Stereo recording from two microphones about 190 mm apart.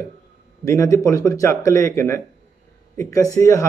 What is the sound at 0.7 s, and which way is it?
Speech, 15° left (ahead or behind).